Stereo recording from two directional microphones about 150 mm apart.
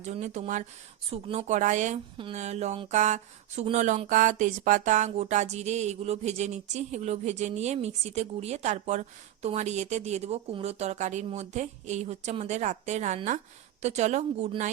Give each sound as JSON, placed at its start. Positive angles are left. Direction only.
{"t": 0.0, "sound": "speech", "side_deg": -50}